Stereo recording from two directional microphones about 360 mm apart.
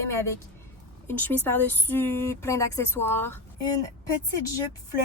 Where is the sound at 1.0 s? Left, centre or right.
Centre.